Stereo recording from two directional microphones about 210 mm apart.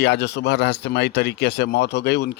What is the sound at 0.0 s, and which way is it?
Speech, 50° left (ahead or behind).